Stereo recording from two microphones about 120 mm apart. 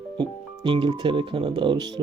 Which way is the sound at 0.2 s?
40° right (ahead or behind).